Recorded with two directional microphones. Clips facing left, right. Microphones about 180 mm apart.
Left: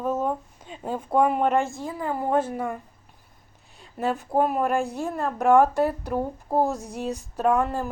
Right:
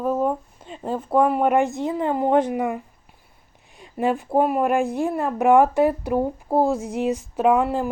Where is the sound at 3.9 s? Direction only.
10° right (ahead or behind).